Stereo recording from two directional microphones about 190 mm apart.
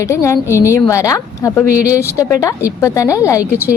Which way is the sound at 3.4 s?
10° right (ahead or behind).